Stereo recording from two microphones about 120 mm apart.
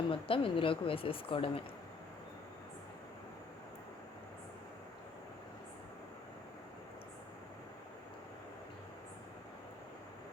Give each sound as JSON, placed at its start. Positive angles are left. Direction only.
{"t": 0.1, "sound": "speech", "side_deg": 50}